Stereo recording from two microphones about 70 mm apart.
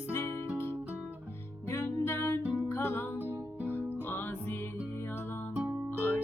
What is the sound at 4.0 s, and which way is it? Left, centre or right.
Music, left.